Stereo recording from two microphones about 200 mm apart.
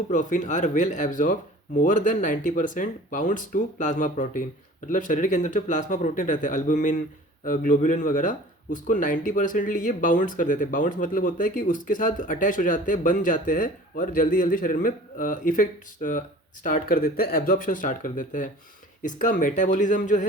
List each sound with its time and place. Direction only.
0.1 s speech: 40° left (ahead or behind)